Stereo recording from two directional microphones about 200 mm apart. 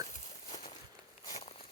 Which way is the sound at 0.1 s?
35° left (ahead or behind).